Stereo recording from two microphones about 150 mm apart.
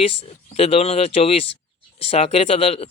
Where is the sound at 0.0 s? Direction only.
40° left (ahead or behind).